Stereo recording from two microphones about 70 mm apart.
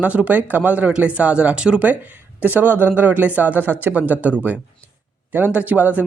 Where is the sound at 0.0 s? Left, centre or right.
Right.